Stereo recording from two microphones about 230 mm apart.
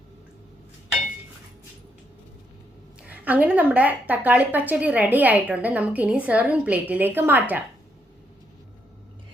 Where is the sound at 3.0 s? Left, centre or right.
Centre.